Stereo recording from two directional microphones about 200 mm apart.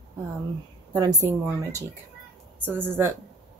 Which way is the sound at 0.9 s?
15° right (ahead or behind).